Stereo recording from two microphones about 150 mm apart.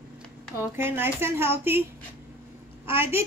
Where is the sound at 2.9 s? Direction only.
15° right (ahead or behind).